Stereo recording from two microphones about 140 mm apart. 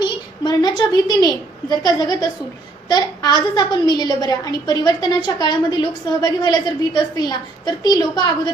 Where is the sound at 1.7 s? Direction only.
30° left (ahead or behind).